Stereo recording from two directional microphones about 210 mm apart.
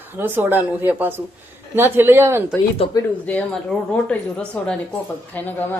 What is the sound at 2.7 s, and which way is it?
Speech, 25° left (ahead or behind).